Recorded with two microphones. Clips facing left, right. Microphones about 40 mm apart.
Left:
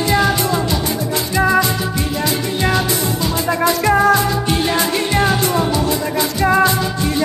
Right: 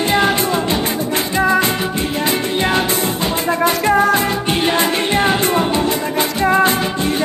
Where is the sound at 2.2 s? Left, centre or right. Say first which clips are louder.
Right 1 dB; right.